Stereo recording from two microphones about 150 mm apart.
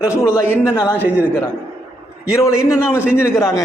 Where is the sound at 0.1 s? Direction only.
15° left (ahead or behind).